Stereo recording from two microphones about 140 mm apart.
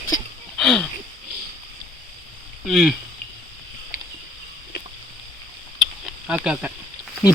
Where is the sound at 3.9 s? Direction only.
90° left.